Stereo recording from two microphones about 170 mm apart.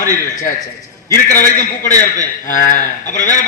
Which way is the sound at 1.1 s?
50° left (ahead or behind).